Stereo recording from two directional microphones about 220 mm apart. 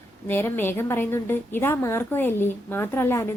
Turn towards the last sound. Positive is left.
turn(degrees=10)  # may be behind; listen again after turning